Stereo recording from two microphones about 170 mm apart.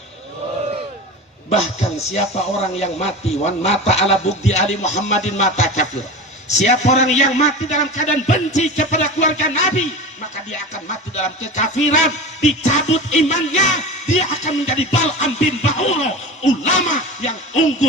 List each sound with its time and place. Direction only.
1.5 s music: 40° left (ahead or behind)
6.6 s a man's voice: 40° left (ahead or behind)
11.1 s a man's voice: 45° left (ahead or behind)
12.6 s music: 40° left (ahead or behind)